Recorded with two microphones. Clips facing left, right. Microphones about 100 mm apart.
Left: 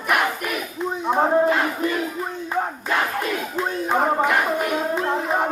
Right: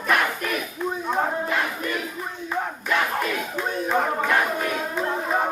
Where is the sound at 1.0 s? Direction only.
30° left (ahead or behind).